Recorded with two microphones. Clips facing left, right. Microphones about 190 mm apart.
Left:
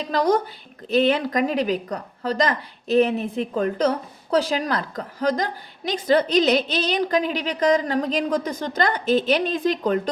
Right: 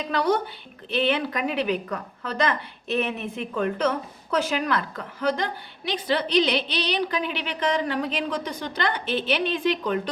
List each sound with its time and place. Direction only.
0.0 s speech: 40° left (ahead or behind)